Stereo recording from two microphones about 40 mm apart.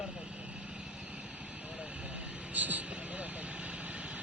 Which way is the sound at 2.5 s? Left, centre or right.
Right.